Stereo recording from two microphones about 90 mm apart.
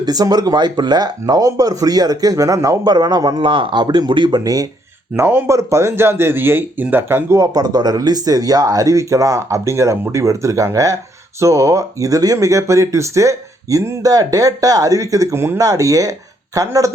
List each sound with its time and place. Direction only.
0.0 s speech: 45° right (ahead or behind)
3.5 s speech: 70° right (ahead or behind); by 4.7 s 45° right (ahead or behind)
5.1 s speech: 30° right (ahead or behind)
15.5 s speech: 40° right (ahead or behind)